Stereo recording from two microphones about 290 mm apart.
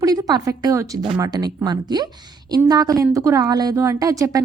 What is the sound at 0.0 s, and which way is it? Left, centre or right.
A woman's voice, centre.